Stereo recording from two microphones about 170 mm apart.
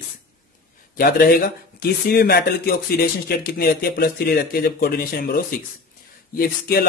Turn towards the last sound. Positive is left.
turn(degrees=70)  # may be behind; listen again after turning